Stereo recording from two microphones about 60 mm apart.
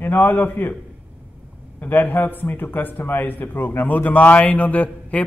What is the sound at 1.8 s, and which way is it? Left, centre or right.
A man's voice, left.